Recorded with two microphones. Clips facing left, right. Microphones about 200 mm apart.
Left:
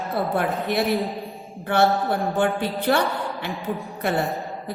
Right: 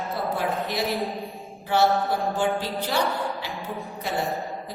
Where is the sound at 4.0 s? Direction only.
60° left (ahead or behind).